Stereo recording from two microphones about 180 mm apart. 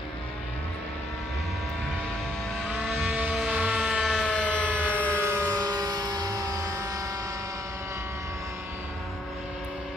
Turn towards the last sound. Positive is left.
turn(degrees=-15)  # may be behind; listen again after turning